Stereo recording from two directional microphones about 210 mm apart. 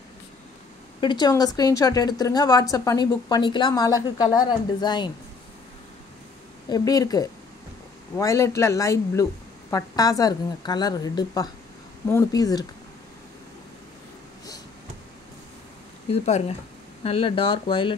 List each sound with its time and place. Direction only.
1.0 s a woman's voice: 20° left (ahead or behind)
6.7 s speech: 15° left (ahead or behind)
16.1 s a woman's voice: 30° left (ahead or behind)